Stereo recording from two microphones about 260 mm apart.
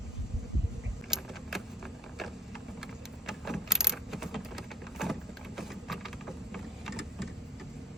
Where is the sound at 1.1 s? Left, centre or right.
Centre.